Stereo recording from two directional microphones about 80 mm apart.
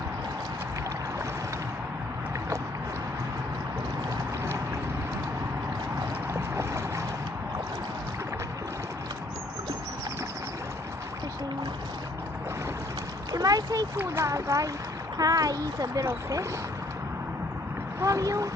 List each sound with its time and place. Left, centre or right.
6.3 s boat: right
13.3 s a sound: right
14.2 s speech: right
16.0 s speech: right
18.0 s speech: right